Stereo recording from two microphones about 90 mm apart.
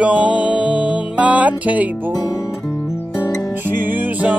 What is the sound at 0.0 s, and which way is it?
Music, 15° right (ahead or behind).